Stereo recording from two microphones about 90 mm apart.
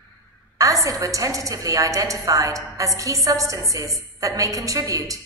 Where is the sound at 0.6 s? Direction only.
40° right (ahead or behind).